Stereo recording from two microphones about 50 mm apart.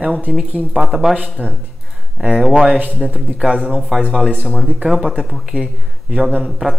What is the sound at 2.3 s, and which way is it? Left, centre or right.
A man's voice, centre.